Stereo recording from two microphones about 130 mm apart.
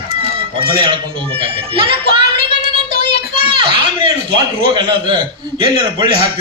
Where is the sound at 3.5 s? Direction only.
40° right (ahead or behind).